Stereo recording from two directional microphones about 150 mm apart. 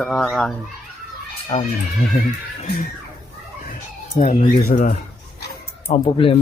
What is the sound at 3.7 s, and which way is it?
Chicken, 60° left (ahead or behind).